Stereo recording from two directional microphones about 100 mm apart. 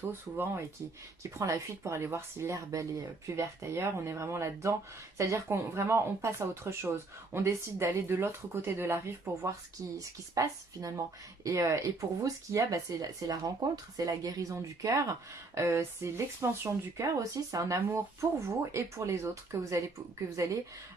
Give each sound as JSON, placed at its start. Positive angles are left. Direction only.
{"t": 0.1, "sound": "speech", "side_deg": -25}